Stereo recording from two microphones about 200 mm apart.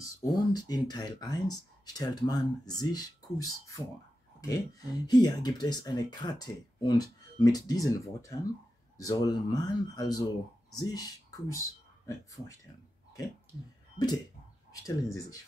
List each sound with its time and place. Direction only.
0.0 s speech: 20° left (ahead or behind)
14.7 s speech: 15° left (ahead or behind)